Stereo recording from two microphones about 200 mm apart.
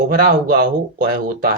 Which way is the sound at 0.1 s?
45° right (ahead or behind).